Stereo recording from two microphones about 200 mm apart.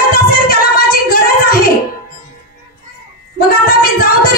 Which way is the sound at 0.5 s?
50° left (ahead or behind).